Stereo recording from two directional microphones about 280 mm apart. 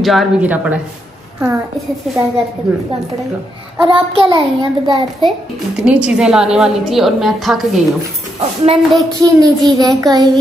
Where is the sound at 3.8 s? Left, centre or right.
Centre.